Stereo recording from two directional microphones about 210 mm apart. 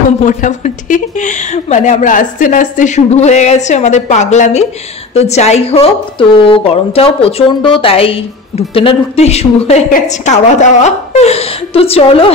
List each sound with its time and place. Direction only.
0.2 s a woman's voice: 35° left (ahead or behind)